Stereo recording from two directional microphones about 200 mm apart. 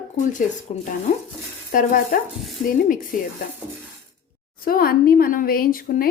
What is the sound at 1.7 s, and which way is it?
Speech, 45° left (ahead or behind).